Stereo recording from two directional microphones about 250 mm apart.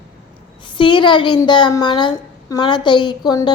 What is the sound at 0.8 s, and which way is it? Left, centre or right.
A woman's voice, centre.